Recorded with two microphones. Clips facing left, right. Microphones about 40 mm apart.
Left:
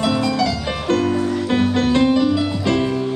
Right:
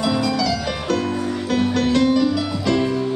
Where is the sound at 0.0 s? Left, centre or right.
Left.